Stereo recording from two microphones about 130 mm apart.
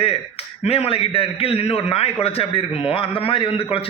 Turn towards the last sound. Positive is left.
turn(degrees=45)  # may be behind; listen again after turning